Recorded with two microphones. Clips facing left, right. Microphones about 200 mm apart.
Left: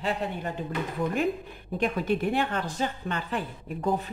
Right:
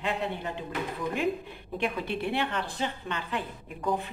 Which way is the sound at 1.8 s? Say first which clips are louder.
Left 5 dB; 45° left (ahead or behind).